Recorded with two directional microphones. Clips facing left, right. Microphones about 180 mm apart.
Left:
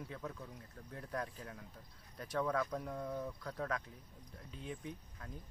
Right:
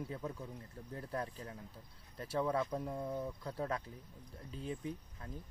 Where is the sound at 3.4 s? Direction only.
25° right (ahead or behind).